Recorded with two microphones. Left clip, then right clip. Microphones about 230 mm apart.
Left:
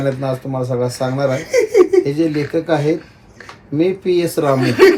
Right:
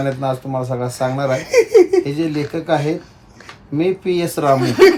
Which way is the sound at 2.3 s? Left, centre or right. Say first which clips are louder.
Left 2 dB; centre.